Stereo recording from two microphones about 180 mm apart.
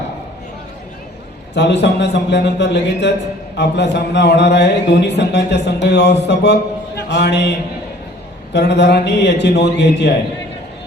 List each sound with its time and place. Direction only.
1.5 s speech: 70° left (ahead or behind)
6.2 s mantra: 70° left (ahead or behind)
8.5 s speech: 70° left (ahead or behind)